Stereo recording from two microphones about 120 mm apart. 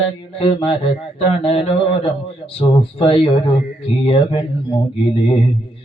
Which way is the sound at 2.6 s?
50° left (ahead or behind).